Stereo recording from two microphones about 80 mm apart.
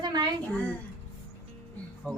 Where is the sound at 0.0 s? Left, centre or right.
Right.